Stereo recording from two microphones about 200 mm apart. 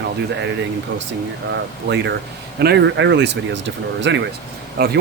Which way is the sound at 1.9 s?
60° right (ahead or behind).